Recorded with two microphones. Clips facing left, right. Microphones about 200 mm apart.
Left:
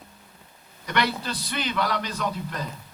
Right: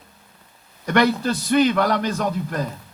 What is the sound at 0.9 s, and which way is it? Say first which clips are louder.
A man's voice: right 8 dB; 45° right (ahead or behind).